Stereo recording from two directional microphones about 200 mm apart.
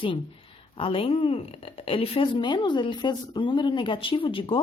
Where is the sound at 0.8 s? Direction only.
25° left (ahead or behind).